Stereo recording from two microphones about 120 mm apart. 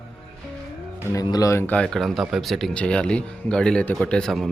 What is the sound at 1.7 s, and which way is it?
Speech, 5° left (ahead or behind).